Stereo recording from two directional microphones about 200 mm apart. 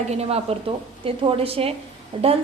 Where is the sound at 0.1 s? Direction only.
30° right (ahead or behind).